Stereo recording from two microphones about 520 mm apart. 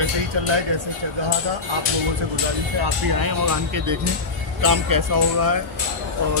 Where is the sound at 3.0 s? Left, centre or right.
Right.